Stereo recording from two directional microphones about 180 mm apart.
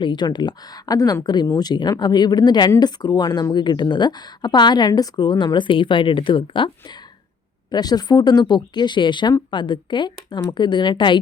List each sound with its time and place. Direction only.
0.0 s speech: 25° left (ahead or behind)
7.7 s speech: 20° left (ahead or behind)